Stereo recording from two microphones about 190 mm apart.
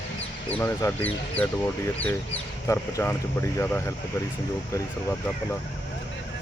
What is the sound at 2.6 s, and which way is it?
Speech, 15° left (ahead or behind).